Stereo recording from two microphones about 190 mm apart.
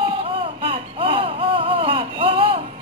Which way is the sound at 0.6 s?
30° right (ahead or behind).